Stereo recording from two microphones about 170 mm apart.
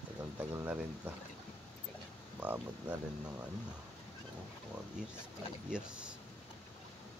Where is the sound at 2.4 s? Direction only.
10° right (ahead or behind).